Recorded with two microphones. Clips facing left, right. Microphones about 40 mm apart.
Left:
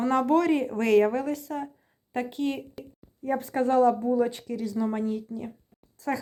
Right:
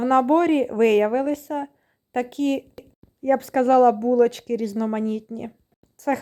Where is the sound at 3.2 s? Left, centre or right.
Right.